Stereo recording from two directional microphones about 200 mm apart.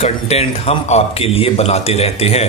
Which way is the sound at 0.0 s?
30° left (ahead or behind).